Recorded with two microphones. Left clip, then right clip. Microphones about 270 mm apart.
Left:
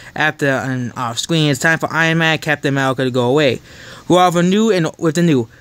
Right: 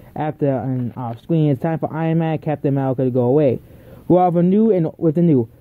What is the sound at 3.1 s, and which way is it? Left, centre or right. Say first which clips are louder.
Speech: right 1 dB; left.